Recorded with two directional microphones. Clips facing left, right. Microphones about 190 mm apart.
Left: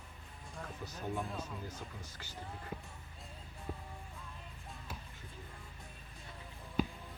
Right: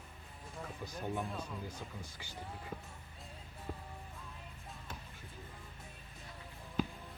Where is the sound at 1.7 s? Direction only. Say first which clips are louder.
Right 1 dB; 15° right (ahead or behind).